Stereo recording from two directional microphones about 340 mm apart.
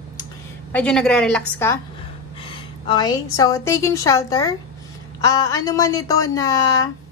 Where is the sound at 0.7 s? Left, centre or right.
Centre.